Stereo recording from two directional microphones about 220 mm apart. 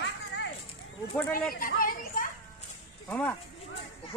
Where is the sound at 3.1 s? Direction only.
5° left (ahead or behind).